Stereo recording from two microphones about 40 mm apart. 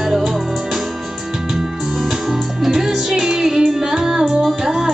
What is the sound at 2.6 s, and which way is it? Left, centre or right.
Music, centre.